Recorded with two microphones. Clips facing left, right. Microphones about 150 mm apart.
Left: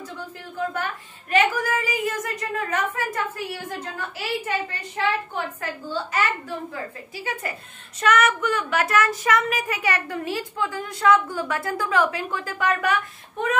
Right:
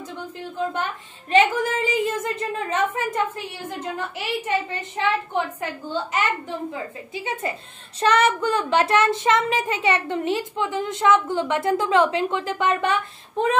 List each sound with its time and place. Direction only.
1.3 s speech: 25° right (ahead or behind)